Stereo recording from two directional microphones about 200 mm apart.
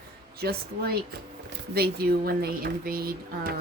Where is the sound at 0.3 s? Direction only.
50° right (ahead or behind).